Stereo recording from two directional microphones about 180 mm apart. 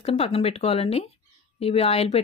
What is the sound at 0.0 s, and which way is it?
Speech, 35° left (ahead or behind).